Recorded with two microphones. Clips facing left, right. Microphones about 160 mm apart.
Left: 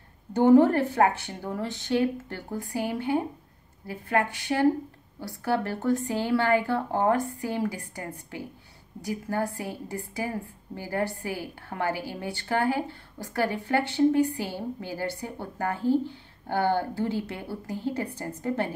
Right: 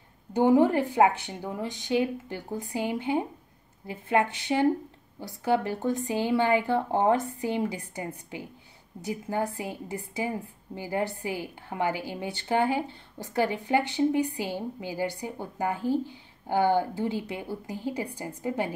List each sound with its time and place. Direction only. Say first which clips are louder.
0.3 s a woman's voice: left 3 dB; 15° right (ahead or behind)